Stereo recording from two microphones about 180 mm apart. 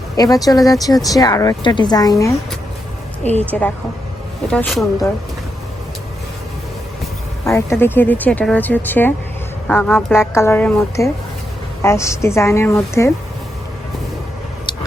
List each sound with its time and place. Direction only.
0.2 s speech: 20° left (ahead or behind)
3.5 s speech: 5° left (ahead or behind)
7.4 s speech: 15° left (ahead or behind)